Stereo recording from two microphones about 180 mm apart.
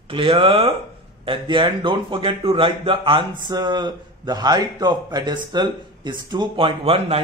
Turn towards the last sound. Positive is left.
turn(degrees=-30)  # may be behind; listen again after turning